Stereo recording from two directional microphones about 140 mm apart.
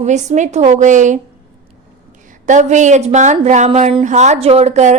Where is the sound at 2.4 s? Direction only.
60° right (ahead or behind).